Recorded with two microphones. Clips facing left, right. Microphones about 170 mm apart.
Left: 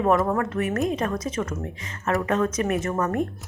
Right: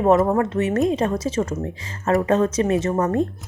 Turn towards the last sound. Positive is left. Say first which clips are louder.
# right 5 dB
turn(degrees=-30)  # may be behind; listen again after turning